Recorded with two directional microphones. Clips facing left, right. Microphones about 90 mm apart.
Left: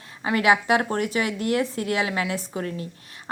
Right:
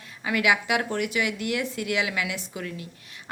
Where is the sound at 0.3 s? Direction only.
35° left (ahead or behind).